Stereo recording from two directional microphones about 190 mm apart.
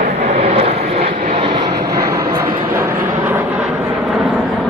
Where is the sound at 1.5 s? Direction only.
20° right (ahead or behind).